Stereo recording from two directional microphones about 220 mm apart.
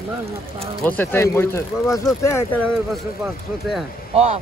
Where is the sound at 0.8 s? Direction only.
10° left (ahead or behind).